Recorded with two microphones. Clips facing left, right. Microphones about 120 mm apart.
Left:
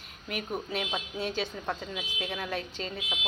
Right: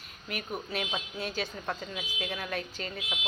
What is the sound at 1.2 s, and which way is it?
Speech, 25° left (ahead or behind).